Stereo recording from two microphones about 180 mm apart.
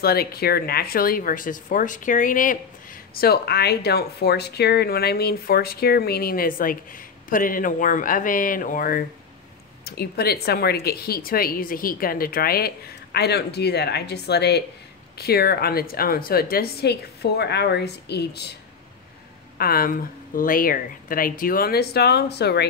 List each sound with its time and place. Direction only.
0.0 s speech: 60° left (ahead or behind)
3.2 s speech: 60° left (ahead or behind)
9.8 s speech: 60° left (ahead or behind)
19.6 s speech: 55° left (ahead or behind)